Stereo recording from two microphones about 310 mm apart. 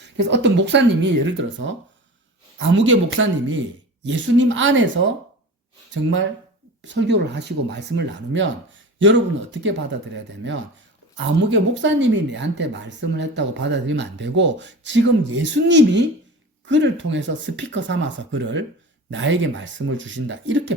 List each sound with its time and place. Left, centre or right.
0.2 s speech: right
6.8 s speech: right
11.4 s speech: right